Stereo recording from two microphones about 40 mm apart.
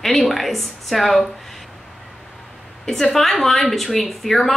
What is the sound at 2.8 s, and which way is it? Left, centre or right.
A woman's voice, centre.